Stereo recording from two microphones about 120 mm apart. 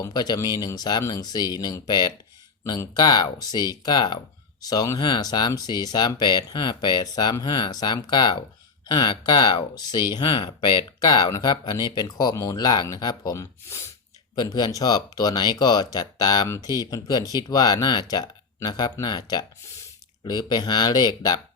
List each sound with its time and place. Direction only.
0.0 s speech: 35° left (ahead or behind)
14.3 s speech: 35° left (ahead or behind)